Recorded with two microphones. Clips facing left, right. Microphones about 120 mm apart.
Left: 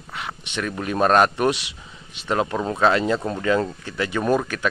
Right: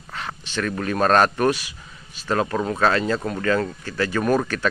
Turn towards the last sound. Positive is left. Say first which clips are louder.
# right 1 dB
turn(degrees=10)  # may be behind; listen again after turning